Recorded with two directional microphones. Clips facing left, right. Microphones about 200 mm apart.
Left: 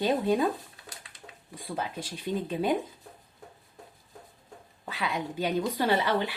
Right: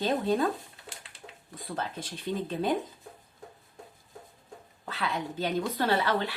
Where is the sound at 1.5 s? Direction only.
10° left (ahead or behind).